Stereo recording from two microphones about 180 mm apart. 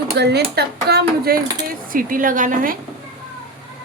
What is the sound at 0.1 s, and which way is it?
Speech, 65° right (ahead or behind).